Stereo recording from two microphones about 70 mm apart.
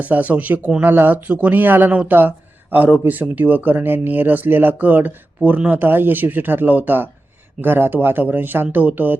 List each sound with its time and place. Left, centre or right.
0.0 s speech: right